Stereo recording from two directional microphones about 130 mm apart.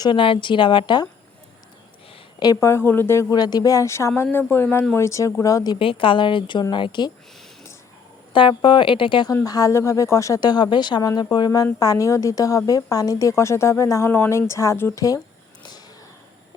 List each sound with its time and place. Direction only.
0.0 s a woman's voice: 40° left (ahead or behind)
2.4 s speech: 25° left (ahead or behind)
5.8 s a woman's voice: 45° left (ahead or behind)
8.3 s a woman's voice: 40° left (ahead or behind)
9.3 s speech: 25° left (ahead or behind)